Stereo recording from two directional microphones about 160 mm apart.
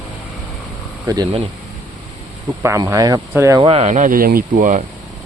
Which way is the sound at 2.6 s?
20° right (ahead or behind).